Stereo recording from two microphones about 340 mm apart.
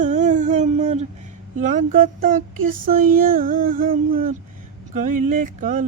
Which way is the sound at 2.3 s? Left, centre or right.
Right.